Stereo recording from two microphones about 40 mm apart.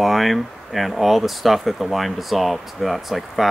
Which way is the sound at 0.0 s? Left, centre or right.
Centre.